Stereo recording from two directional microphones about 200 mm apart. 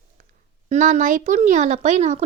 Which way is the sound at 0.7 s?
40° right (ahead or behind).